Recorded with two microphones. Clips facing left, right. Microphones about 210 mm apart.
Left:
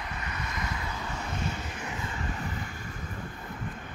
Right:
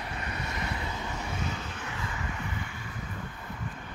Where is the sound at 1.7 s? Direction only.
15° left (ahead or behind).